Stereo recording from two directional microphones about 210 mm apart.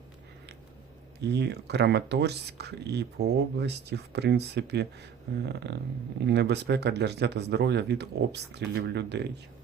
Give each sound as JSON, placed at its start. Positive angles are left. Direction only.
{"t": 1.2, "sound": "speech", "side_deg": -55}